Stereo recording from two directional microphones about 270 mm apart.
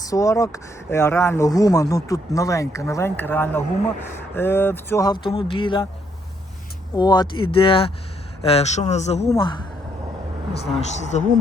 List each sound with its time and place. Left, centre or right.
0.0 s speech: centre
6.9 s speech: centre
9.2 s speech: centre
10.8 s speech: left